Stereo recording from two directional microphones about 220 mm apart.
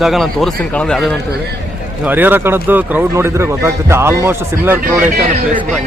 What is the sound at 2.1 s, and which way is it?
Speech, 10° right (ahead or behind).